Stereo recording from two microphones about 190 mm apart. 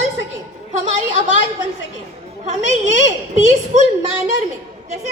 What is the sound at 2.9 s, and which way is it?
Speech, 40° right (ahead or behind).